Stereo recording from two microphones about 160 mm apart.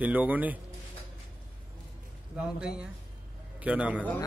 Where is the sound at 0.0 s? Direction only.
10° right (ahead or behind).